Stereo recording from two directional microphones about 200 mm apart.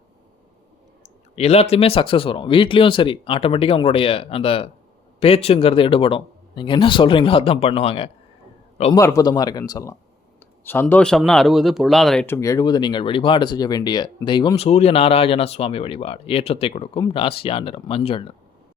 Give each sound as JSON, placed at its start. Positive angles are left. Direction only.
{"t": 1.4, "sound": "speech", "side_deg": 30}
{"t": 9.0, "sound": "a man's voice", "side_deg": 15}
{"t": 12.2, "sound": "speech", "side_deg": 15}